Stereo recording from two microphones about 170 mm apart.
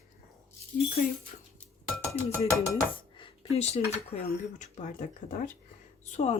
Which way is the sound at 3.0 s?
35° left (ahead or behind).